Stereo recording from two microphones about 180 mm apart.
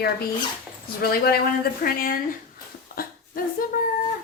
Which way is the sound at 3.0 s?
55° left (ahead or behind).